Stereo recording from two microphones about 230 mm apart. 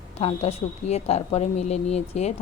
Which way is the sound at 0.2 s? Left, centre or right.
Left.